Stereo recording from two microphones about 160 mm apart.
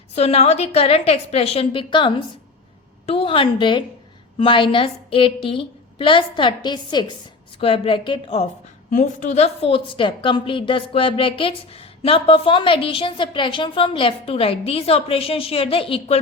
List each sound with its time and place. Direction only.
0.1 s a woman's voice: 40° left (ahead or behind)
8.9 s a woman's voice: 50° left (ahead or behind)